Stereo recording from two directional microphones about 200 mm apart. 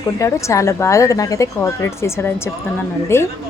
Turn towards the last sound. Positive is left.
turn(degrees=15)  # may be behind; listen again after turning